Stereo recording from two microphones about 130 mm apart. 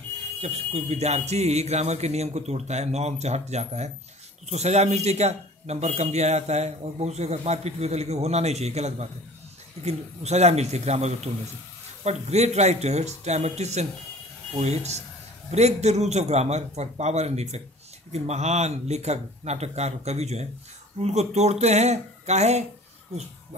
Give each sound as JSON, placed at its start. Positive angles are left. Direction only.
{"t": 0.4, "sound": "speech", "side_deg": -55}